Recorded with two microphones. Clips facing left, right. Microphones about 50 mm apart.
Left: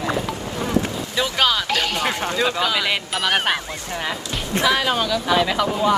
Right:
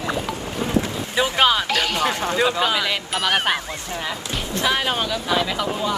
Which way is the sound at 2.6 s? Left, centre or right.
Right.